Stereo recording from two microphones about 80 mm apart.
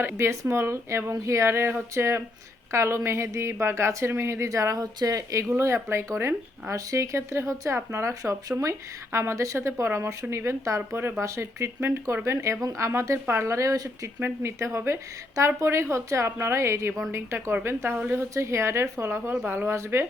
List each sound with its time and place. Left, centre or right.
0.2 s a woman's voice: right
5.5 s a woman's voice: right
14.2 s a woman's voice: right